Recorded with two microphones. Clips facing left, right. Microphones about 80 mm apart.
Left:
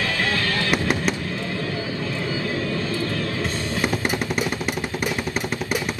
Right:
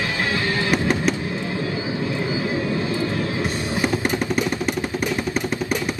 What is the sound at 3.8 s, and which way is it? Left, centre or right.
Music, centre.